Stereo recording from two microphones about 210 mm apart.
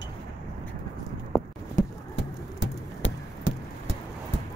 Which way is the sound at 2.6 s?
60° left (ahead or behind).